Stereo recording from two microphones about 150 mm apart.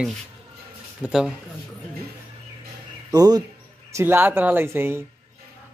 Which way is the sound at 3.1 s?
25° right (ahead or behind).